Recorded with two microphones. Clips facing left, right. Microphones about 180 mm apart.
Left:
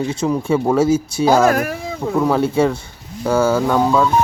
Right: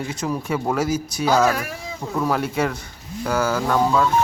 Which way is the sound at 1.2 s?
50° left (ahead or behind).